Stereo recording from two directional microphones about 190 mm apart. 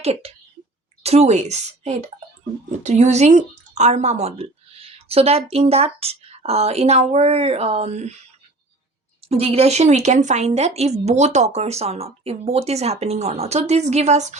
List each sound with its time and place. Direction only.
0.0 s speech: 30° right (ahead or behind)
9.3 s speech: 30° right (ahead or behind)